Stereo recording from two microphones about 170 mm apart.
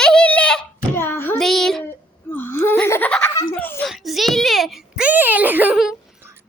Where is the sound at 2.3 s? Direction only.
15° left (ahead or behind).